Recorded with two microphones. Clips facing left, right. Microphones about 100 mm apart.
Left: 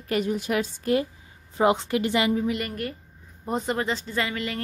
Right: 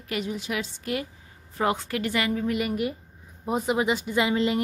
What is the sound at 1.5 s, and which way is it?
Speech, 20° left (ahead or behind).